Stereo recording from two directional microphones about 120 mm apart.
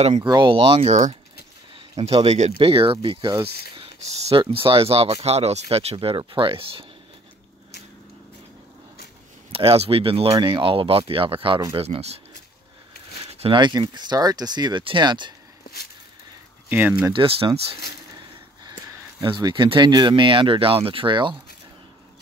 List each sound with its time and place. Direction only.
0.1 s speech: 40° right (ahead or behind); by 2.5 s 65° right (ahead or behind)
2.6 s speech: 45° right (ahead or behind)
3.7 s speech: 60° right (ahead or behind)
4.4 s speech: 45° right (ahead or behind)
9.5 s speech: 55° right (ahead or behind)
10.4 s speech: 45° right (ahead or behind); by 12.2 s 60° right (ahead or behind)
13.2 s a sound: 55° right (ahead or behind)
13.6 s speech: 35° right (ahead or behind)
16.6 s speech: 15° right (ahead or behind)
17.1 s speech: 45° right (ahead or behind)
19.2 s speech: 40° right (ahead or behind)